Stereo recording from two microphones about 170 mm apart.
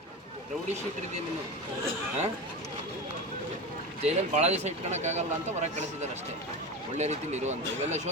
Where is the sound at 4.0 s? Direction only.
40° right (ahead or behind).